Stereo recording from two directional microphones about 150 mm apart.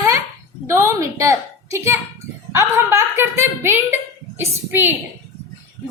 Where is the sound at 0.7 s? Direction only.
20° right (ahead or behind).